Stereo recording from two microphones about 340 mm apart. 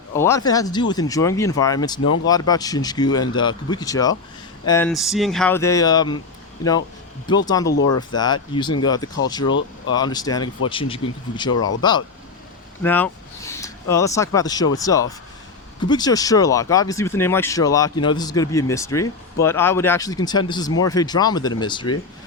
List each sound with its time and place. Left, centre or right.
0.1 s speech: centre
2.0 s speech: left
2.2 s speech: centre
7.3 s speech: centre
9.5 s speech: left
9.9 s speech: centre